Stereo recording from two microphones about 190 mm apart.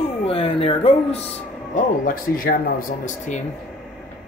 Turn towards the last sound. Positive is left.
turn(degrees=40)  # may be behind; listen again after turning